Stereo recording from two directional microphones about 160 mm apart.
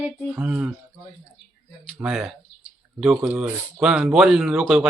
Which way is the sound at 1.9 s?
5° right (ahead or behind).